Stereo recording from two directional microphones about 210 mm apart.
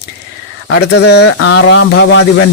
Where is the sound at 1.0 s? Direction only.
55° left (ahead or behind).